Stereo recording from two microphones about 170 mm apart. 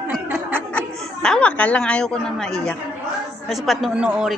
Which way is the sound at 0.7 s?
5° left (ahead or behind).